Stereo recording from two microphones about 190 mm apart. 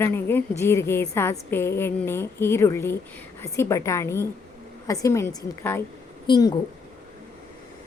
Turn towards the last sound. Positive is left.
turn(degrees=25)  # may be behind; listen again after turning